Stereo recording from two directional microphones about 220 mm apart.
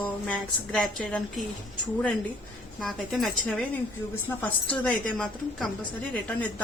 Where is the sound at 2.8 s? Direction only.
Centre (ahead or behind).